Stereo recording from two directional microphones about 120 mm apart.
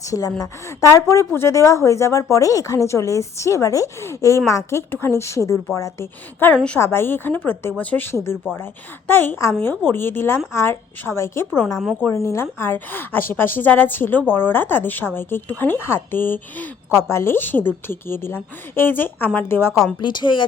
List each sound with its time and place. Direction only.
0.1 s speech: 30° left (ahead or behind)
20.0 s speech: 40° left (ahead or behind)